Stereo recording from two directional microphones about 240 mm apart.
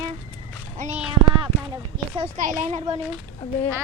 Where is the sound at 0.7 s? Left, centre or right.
Right.